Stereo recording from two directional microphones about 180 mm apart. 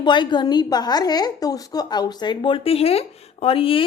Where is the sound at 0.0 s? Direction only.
25° left (ahead or behind).